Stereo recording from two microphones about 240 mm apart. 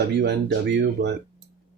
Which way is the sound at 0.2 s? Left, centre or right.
Right.